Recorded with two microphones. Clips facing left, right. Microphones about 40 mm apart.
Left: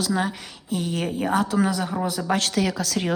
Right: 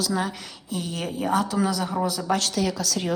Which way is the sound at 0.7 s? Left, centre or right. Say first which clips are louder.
Left 4 dB; left.